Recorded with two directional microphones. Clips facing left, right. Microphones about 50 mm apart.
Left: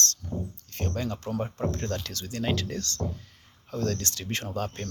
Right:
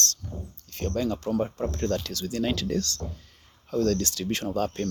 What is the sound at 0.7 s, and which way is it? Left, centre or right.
Speech, left.